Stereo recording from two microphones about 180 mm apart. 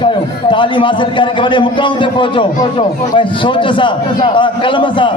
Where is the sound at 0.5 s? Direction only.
25° left (ahead or behind).